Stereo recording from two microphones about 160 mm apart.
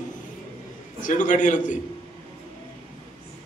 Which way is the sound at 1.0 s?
50° left (ahead or behind).